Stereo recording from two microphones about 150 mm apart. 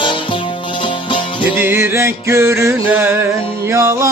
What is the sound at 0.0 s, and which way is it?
Music, 35° left (ahead or behind).